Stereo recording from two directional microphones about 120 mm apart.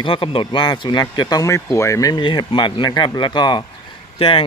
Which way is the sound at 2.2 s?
40° left (ahead or behind).